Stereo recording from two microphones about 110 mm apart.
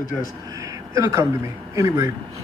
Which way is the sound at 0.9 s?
30° right (ahead or behind).